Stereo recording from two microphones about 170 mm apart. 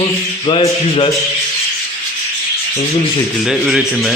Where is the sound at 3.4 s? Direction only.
Centre (ahead or behind).